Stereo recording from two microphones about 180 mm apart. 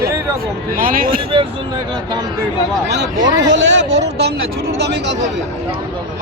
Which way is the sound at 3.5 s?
85° right.